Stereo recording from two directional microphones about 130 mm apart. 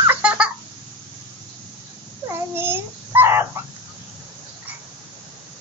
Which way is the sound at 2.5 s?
15° right (ahead or behind).